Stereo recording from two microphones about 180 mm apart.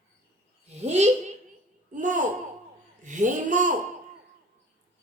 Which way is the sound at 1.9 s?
45° right (ahead or behind).